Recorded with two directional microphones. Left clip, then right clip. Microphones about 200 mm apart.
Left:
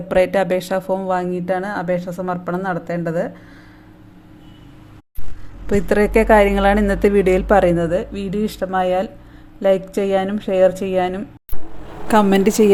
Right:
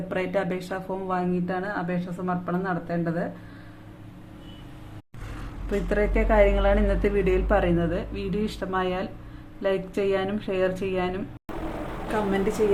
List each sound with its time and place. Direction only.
0.1 s a woman's voice: 40° left (ahead or behind)
5.7 s a woman's voice: 40° left (ahead or behind)
12.1 s a woman's voice: 45° left (ahead or behind)